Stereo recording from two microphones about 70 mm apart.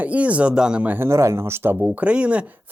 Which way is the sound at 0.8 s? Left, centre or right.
Right.